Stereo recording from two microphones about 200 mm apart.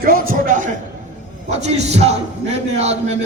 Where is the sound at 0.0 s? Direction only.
45° right (ahead or behind).